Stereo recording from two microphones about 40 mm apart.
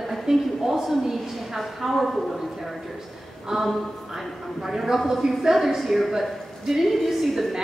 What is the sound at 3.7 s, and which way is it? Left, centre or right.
A woman's voice, centre.